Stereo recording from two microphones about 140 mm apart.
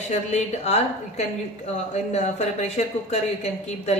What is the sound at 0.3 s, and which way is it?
Speech, 50° left (ahead or behind).